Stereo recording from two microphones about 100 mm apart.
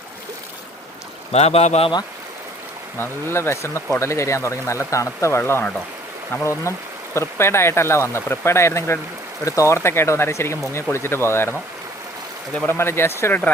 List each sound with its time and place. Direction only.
1.3 s speech: 90° left
3.0 s speech: 25° left (ahead or behind)
12.6 s speech: 25° left (ahead or behind)